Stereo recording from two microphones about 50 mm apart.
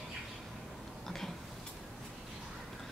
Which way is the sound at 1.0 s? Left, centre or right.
Centre.